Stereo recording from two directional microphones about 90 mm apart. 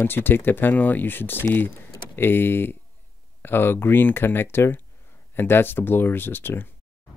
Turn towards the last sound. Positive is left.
turn(degrees=25)  # may be behind; listen again after turning